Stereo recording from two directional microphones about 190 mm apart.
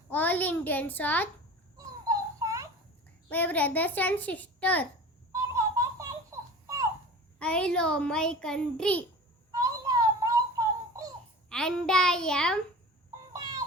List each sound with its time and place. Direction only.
0.1 s a child's voice: 10° left (ahead or behind)
1.7 s a sound: 20° right (ahead or behind)
3.2 s a child's voice: 10° left (ahead or behind)
5.3 s a sound: 15° right (ahead or behind)
7.3 s a child's voice: 5° left (ahead or behind)
9.5 s music: 20° right (ahead or behind)
11.4 s a child's voice: 5° left (ahead or behind)